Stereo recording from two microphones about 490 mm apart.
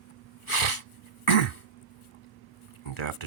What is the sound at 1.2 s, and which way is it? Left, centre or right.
Cough, left.